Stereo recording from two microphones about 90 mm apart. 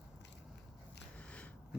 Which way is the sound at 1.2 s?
15° left (ahead or behind).